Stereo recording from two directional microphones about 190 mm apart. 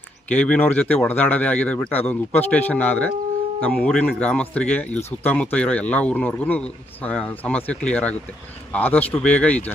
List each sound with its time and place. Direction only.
0.3 s speech: 5° left (ahead or behind)